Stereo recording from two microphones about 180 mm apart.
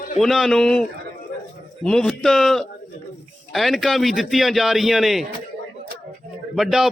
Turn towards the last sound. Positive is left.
turn(degrees=0)  # may be behind; listen again after turning